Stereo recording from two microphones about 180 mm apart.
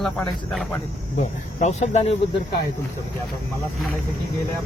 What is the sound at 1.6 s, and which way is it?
Speech, 40° left (ahead or behind).